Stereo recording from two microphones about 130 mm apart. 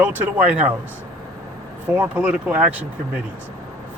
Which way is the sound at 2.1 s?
10° right (ahead or behind).